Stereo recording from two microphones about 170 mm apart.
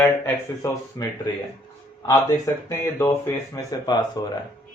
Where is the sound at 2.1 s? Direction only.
20° left (ahead or behind).